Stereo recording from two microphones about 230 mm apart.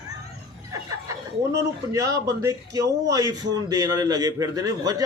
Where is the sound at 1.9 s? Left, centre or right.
Centre.